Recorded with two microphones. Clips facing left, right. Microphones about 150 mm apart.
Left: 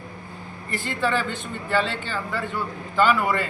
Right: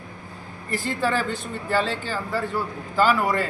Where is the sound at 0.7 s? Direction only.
40° right (ahead or behind).